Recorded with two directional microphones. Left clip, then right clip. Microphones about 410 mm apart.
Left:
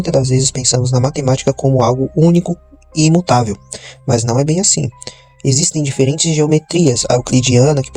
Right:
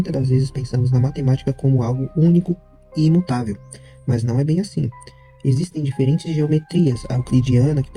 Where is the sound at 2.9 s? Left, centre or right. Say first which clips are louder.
Left 8 dB; centre.